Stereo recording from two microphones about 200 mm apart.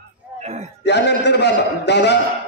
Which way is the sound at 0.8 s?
55° left (ahead or behind).